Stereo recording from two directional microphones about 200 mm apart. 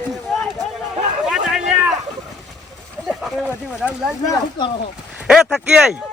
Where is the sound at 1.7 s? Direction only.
Centre (ahead or behind).